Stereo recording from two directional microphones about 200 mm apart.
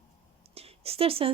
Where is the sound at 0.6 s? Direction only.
30° right (ahead or behind).